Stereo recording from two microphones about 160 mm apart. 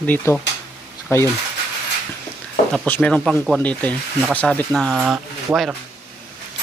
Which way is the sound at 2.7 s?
5° left (ahead or behind).